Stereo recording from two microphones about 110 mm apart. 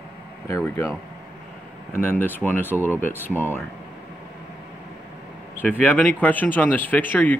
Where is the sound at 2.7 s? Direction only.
20° right (ahead or behind).